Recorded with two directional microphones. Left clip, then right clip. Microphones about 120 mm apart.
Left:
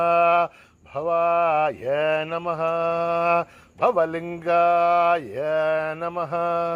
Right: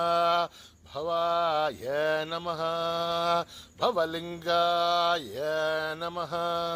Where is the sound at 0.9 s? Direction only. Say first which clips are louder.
Left 7 dB; 20° left (ahead or behind).